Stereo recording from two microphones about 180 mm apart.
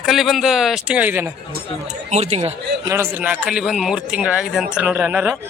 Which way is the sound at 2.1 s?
35° right (ahead or behind).